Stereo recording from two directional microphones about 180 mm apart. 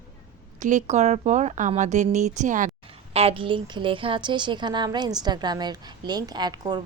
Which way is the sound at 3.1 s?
35° right (ahead or behind).